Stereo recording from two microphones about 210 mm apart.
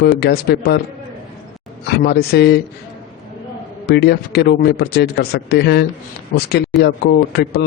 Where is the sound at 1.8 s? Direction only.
50° left (ahead or behind).